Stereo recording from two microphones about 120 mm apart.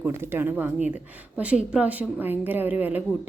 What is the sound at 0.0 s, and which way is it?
A woman's voice, 20° right (ahead or behind).